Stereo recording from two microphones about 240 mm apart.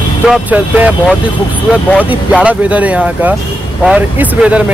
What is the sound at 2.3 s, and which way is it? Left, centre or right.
Speech, centre.